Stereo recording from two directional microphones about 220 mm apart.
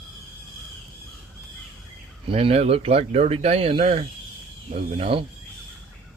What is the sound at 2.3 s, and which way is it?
Speech, 25° right (ahead or behind).